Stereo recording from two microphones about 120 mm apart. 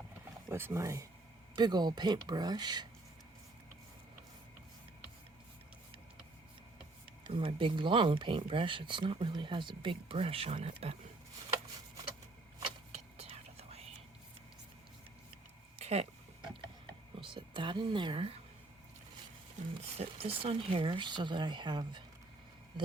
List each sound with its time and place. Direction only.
0.4 s speech: 20° right (ahead or behind)
1.5 s speech: 35° right (ahead or behind)
7.3 s speech: 45° right (ahead or behind)
12.9 s whispering: 60° right (ahead or behind)
15.8 s a sound: 60° right (ahead or behind)
17.2 s speech: 45° right (ahead or behind)
19.6 s speech: 85° right
20.0 s speech: 55° right (ahead or behind); by 22.0 s 40° right (ahead or behind)